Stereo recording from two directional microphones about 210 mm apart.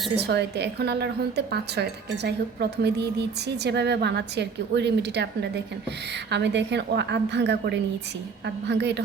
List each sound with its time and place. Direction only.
0.2 s a woman's voice: 50° right (ahead or behind)